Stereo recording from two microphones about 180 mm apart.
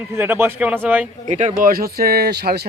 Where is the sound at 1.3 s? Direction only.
45° right (ahead or behind); by 2.7 s 65° right (ahead or behind).